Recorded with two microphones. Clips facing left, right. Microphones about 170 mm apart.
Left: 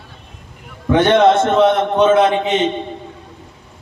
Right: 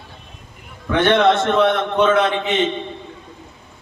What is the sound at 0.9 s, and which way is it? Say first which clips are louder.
Speech: left 3 dB; 25° left (ahead or behind).